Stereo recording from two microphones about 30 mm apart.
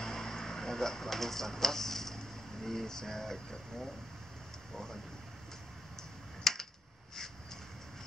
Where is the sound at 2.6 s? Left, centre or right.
Centre.